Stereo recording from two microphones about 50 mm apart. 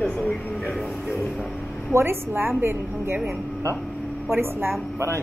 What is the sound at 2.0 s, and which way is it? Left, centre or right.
A woman's voice, right.